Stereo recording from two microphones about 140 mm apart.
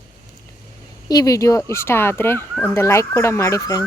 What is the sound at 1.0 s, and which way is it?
Speech, 25° left (ahead or behind).